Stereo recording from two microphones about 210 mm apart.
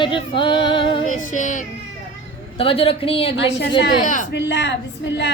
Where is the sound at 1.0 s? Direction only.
35° left (ahead or behind).